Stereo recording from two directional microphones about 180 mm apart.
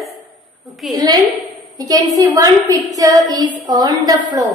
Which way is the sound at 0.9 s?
20° right (ahead or behind).